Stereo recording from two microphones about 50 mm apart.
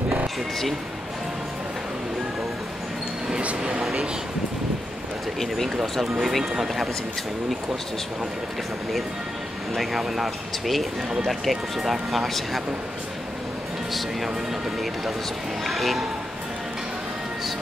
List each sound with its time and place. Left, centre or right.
3.4 s speech: centre
5.8 s speech: centre
9.8 s speech: centre
15.6 s speech: centre